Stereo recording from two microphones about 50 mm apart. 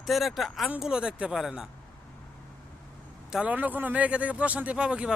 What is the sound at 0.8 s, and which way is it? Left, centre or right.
Speech, centre.